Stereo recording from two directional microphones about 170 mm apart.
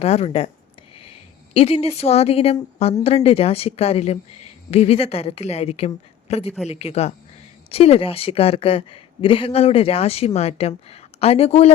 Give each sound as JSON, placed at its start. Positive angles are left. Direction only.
{"t": 0.0, "sound": "a woman's voice", "side_deg": 40}
{"t": 1.5, "sound": "a woman's voice", "side_deg": 35}